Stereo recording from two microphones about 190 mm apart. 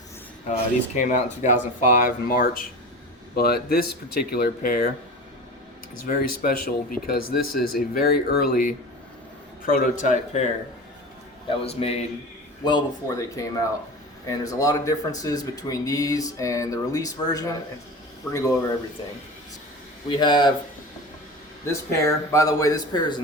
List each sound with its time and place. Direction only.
0.4 s speech: 40° left (ahead or behind)
6.1 s speech: 50° left (ahead or behind); by 12.0 s 35° left (ahead or behind)
12.6 s a man's voice: 20° left (ahead or behind)
20.1 s speech: 25° left (ahead or behind)
21.7 s a man's voice: 15° left (ahead or behind)